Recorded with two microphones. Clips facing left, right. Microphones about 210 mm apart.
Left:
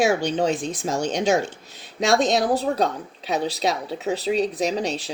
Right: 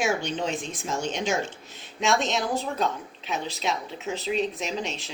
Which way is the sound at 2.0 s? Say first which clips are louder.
Left 6 dB; 35° left (ahead or behind).